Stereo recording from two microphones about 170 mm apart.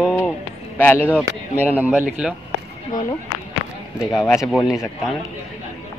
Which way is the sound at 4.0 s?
Centre (ahead or behind).